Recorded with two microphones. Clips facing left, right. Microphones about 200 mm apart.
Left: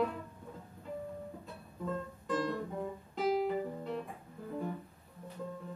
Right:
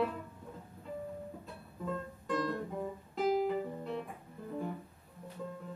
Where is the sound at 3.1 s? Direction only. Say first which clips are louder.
Right 1 dB; centre (ahead or behind).